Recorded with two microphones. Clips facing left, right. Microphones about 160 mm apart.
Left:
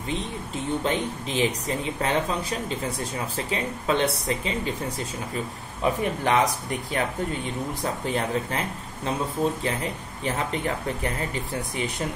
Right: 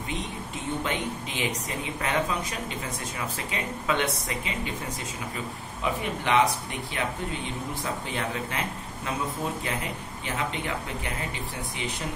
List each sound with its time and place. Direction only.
0.8 s speech: 35° left (ahead or behind)
3.3 s speech: 30° left (ahead or behind)
5.8 s speech: 40° left (ahead or behind)
10.2 s speech: 40° left (ahead or behind)